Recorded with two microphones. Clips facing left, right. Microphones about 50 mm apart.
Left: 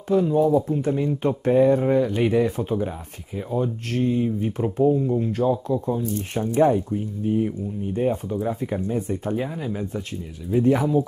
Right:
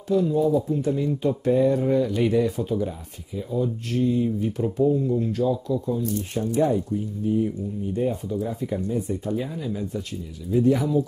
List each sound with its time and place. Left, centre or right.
0.1 s speech: left
3.3 s speech: left
5.3 s speech: left